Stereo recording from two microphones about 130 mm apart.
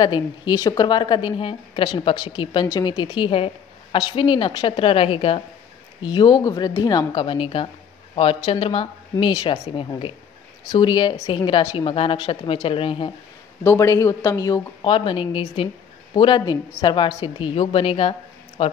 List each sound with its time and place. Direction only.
0.0 s a woman's voice: 35° left (ahead or behind)
6.0 s a woman's voice: 35° left (ahead or behind)
13.7 s a woman's voice: 20° left (ahead or behind); by 18.7 s 45° left (ahead or behind)